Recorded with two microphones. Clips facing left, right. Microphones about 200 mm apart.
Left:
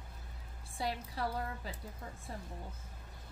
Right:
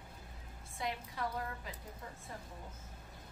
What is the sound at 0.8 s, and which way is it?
Speech, 35° left (ahead or behind).